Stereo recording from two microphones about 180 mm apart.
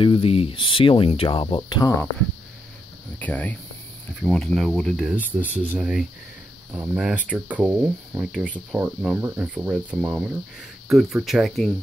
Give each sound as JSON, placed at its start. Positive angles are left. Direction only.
{"t": 0.0, "sound": "speech", "side_deg": 30}
{"t": 3.2, "sound": "speech", "side_deg": 10}
{"t": 8.3, "sound": "speech", "side_deg": 5}
{"t": 8.5, "sound": "speech", "side_deg": -10}